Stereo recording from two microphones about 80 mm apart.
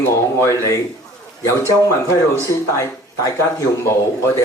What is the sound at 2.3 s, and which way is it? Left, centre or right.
A man's voice, left.